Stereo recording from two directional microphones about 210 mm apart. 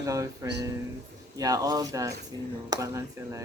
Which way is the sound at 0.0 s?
15° right (ahead or behind).